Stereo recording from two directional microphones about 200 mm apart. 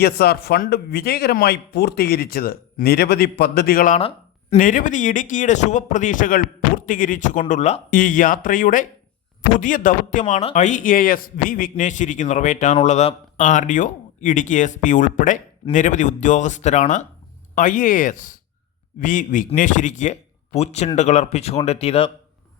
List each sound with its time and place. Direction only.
0.0 s speech: 50° left (ahead or behind); by 22.1 s 30° left (ahead or behind)